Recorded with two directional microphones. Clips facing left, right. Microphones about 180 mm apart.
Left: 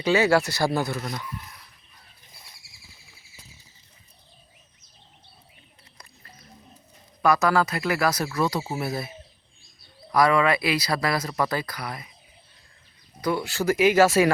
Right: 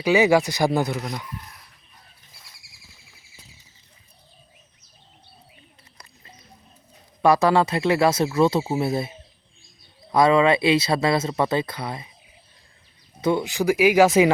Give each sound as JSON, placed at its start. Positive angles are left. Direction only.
{"t": 0.0, "sound": "speech", "side_deg": -15}
{"t": 7.2, "sound": "speech", "side_deg": -30}
{"t": 13.2, "sound": "speech", "side_deg": -20}